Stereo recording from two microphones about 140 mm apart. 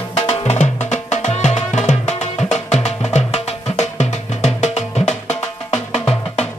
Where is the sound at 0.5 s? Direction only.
55° left (ahead or behind).